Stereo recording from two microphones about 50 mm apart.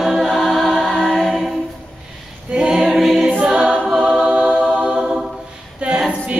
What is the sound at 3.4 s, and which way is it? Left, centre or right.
Choir, centre.